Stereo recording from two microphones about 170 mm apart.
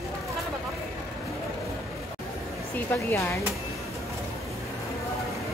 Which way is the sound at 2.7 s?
15° left (ahead or behind).